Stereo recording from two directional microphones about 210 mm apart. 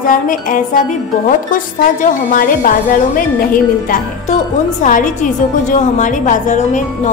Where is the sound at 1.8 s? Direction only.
40° left (ahead or behind).